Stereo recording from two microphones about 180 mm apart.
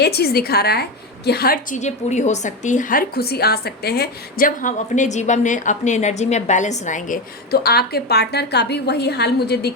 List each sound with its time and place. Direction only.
0.0 s a woman's voice: 60° left (ahead or behind)
1.8 s a woman's voice: 40° left (ahead or behind); by 9.7 s 65° left (ahead or behind)